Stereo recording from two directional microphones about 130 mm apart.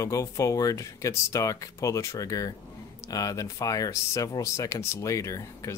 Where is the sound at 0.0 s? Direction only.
25° left (ahead or behind).